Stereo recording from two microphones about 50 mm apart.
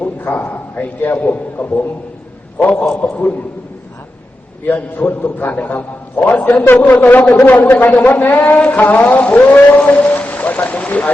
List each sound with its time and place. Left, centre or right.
0.0 s a man's voice: left
4.6 s a man's voice: left